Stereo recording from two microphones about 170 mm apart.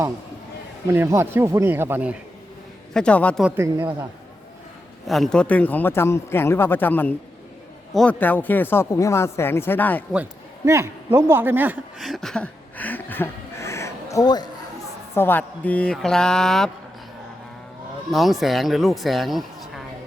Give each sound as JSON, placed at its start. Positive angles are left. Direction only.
{"t": 0.9, "sound": "speech", "side_deg": -15}
{"t": 2.9, "sound": "a man's voice", "side_deg": 5}
{"t": 3.4, "sound": "speech", "side_deg": -10}
{"t": 5.0, "sound": "a man's voice", "side_deg": 0}
{"t": 10.7, "sound": "speech", "side_deg": -15}
{"t": 12.0, "sound": "a sound", "side_deg": 0}
{"t": 15.1, "sound": "speech", "side_deg": 10}
{"t": 18.1, "sound": "speech", "side_deg": 0}